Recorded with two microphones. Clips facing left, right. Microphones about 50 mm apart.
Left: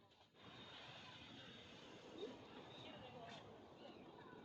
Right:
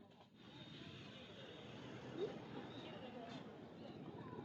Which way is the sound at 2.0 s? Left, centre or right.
Right.